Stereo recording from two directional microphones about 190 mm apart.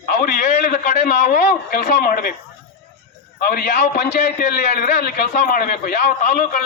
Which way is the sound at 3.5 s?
50° left (ahead or behind).